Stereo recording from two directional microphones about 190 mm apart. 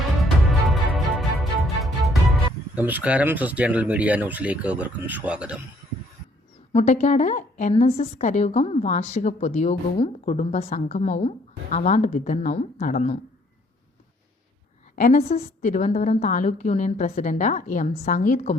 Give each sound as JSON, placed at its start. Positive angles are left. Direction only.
{"t": 0.2, "sound": "music", "side_deg": 0}
{"t": 2.7, "sound": "speech", "side_deg": -10}
{"t": 6.7, "sound": "a woman's voice", "side_deg": 35}
{"t": 14.9, "sound": "a woman's voice", "side_deg": 40}